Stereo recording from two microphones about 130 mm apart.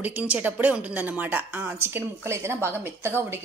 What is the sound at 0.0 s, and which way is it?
A woman's voice, 15° right (ahead or behind).